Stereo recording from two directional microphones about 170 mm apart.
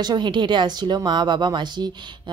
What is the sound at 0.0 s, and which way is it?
Speech, 25° right (ahead or behind).